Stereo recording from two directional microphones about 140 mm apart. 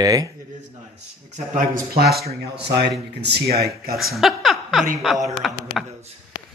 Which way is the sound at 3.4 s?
90° right.